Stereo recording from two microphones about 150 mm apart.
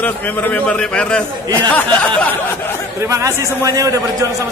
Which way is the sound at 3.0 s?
20° right (ahead or behind).